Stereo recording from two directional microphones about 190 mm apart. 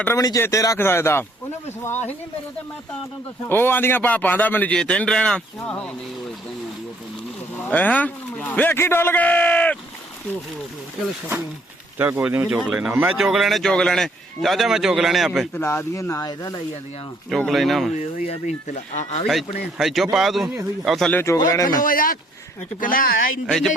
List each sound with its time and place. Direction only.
0.0 s a man's voice: 15° left (ahead or behind)
3.5 s a man's voice: 10° left (ahead or behind)
7.6 s a man's voice: 10° left (ahead or behind)
11.9 s speech: 10° right (ahead or behind)
15.5 s a man's voice: 10° left (ahead or behind)
17.2 s speech: centre (ahead or behind)
17.9 s speech: 40° left (ahead or behind)
19.8 s a man's voice: centre (ahead or behind); by 21.7 s 20° left (ahead or behind)
21.8 s speech: 45° left (ahead or behind)
23.5 s speech: centre (ahead or behind)